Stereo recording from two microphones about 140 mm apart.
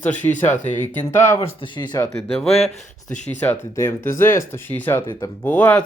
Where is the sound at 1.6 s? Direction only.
35° left (ahead or behind).